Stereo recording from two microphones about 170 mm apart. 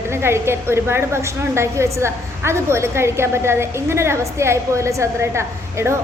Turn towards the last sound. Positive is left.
turn(degrees=-15)  # may be behind; listen again after turning